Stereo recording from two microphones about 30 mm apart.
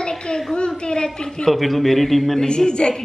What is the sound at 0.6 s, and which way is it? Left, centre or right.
Speech, left.